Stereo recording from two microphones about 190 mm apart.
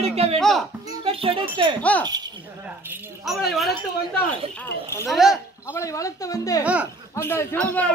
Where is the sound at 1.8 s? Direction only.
5° left (ahead or behind).